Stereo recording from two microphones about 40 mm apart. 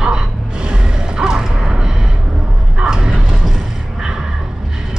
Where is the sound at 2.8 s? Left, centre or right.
Right.